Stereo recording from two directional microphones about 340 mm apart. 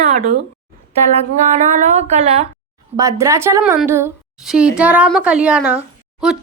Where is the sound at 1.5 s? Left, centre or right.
Centre.